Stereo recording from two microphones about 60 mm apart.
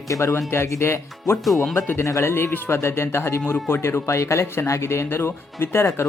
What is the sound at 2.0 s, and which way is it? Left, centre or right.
Speech, left.